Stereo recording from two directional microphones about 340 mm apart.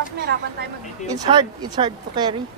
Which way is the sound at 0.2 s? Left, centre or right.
Right.